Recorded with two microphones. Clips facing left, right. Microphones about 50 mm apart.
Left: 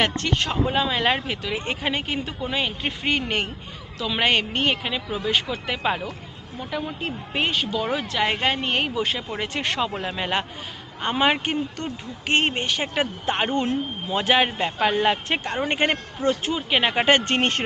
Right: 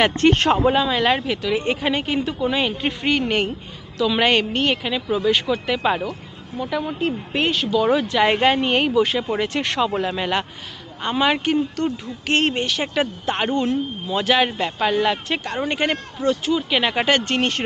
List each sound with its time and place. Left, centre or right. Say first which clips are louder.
0.2 s speech: right 9 dB; right
0.7 s speech: right 3 dB; centre
8.1 s speech: right 6 dB; centre
11.0 s speech: right 1 dB; centre
13.6 s a man's voice: right 3 dB; left
17.3 s a man's voice: right 1 dB; left